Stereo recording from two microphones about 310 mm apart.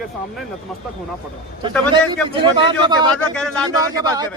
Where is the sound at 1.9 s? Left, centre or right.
Centre.